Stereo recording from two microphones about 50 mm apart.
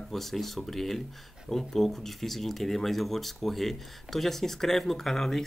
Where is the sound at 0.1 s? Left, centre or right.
Centre.